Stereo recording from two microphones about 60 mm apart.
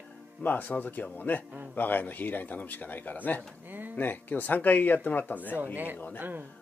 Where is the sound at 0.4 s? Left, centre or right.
Left.